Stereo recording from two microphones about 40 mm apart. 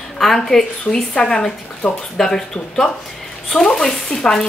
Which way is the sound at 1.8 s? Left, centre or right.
Left.